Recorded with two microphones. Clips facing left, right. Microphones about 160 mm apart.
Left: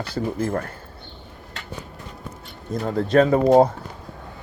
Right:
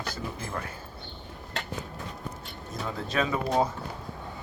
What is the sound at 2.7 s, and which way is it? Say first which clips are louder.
Speech: left 11 dB; 60° left (ahead or behind).